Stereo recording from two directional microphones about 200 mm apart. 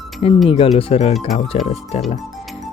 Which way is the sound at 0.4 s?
30° left (ahead or behind).